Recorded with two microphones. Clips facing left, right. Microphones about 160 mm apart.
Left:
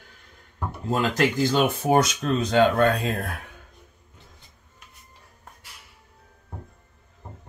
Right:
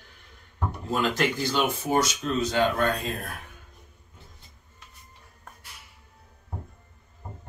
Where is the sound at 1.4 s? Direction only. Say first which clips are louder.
Left 5 dB; 50° left (ahead or behind).